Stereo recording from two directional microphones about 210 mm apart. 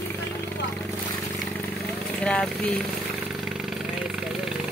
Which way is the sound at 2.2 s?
5° left (ahead or behind).